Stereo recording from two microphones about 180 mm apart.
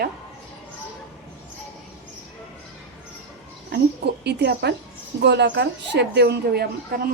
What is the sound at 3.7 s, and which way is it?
A woman's voice, 65° right (ahead or behind).